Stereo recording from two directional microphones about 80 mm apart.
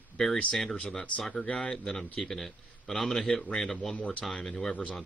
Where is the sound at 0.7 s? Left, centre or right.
Centre.